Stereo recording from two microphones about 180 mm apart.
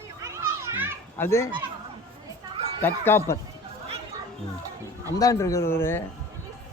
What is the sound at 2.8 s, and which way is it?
Speech, 10° left (ahead or behind).